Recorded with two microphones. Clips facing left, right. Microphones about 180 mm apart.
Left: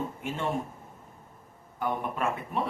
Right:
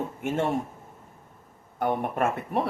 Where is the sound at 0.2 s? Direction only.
50° right (ahead or behind).